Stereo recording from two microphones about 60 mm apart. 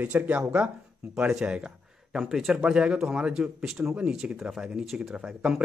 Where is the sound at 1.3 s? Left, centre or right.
Centre.